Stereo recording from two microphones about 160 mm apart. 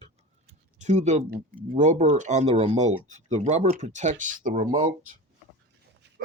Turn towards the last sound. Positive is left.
turn(degrees=-55)  # may be behind; listen again after turning